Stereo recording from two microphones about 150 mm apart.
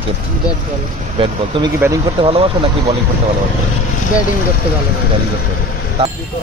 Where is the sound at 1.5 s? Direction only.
35° right (ahead or behind).